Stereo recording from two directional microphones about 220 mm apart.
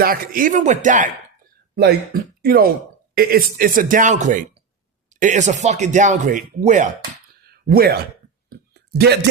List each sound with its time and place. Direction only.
0.0 s speech: 40° right (ahead or behind)
2.4 s speech: 40° right (ahead or behind)
7.4 s a sound: 45° right (ahead or behind)